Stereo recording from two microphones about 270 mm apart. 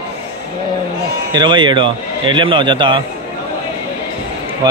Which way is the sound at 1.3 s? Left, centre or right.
Centre.